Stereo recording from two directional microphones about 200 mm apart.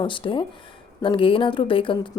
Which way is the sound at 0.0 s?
25° left (ahead or behind).